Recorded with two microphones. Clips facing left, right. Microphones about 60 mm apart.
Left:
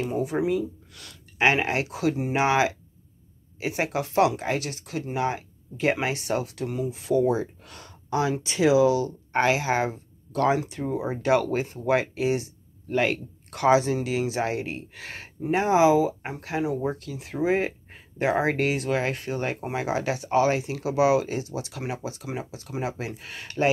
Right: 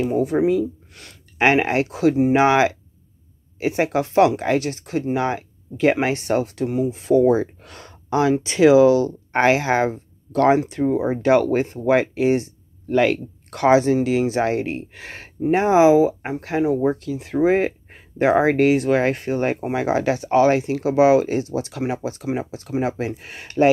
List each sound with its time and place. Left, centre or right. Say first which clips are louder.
0.1 s speech: right 6 dB; right
0.9 s speech: right 5 dB; right
10.6 s speech: right 8 dB; right